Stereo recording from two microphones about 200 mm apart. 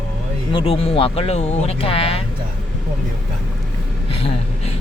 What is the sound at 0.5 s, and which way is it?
Speech, 30° left (ahead or behind).